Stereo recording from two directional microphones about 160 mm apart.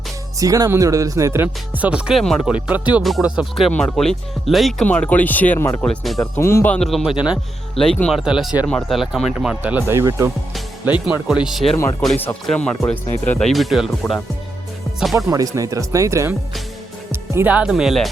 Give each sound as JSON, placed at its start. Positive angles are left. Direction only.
{"t": 0.3, "sound": "speech", "side_deg": -20}
{"t": 3.7, "sound": "speech", "side_deg": 10}
{"t": 5.8, "sound": "speech", "side_deg": 5}
{"t": 6.3, "sound": "speech", "side_deg": 15}
{"t": 7.8, "sound": "speech", "side_deg": 5}
{"t": 10.5, "sound": "speech", "side_deg": -5}
{"t": 12.0, "sound": "speech", "side_deg": 10}
{"t": 13.5, "sound": "speech", "side_deg": 0}
{"t": 15.0, "sound": "speech", "side_deg": 0}
{"t": 15.3, "sound": "speech", "side_deg": -20}